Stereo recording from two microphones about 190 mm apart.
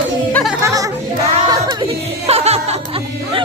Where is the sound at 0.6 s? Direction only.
15° right (ahead or behind).